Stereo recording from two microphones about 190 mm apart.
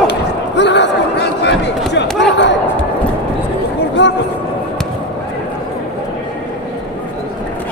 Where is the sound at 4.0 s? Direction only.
65° left (ahead or behind).